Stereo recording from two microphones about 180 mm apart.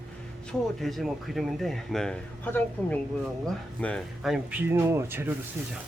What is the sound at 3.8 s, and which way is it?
Speech, 5° left (ahead or behind).